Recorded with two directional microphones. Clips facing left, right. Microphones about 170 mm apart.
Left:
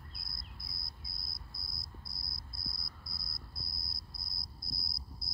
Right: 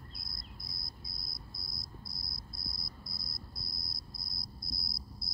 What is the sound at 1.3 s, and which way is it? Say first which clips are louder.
Cricket: right 3 dB; 55° left (ahead or behind).